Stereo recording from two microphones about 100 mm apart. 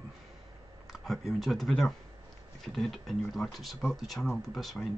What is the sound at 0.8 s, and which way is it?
Speech, centre (ahead or behind).